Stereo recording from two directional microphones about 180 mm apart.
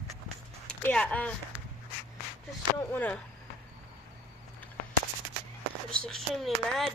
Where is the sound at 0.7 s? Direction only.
5° left (ahead or behind).